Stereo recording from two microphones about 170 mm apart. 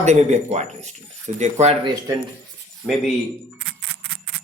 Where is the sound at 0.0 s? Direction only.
40° right (ahead or behind).